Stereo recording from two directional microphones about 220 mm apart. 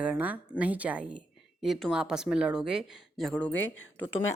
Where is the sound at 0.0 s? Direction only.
5° right (ahead or behind).